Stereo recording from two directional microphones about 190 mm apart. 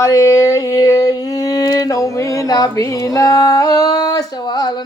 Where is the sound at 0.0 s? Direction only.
15° left (ahead or behind).